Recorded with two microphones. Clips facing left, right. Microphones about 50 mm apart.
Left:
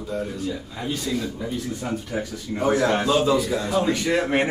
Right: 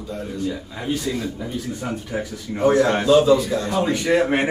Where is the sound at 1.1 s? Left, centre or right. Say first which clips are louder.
Right 1 dB; centre.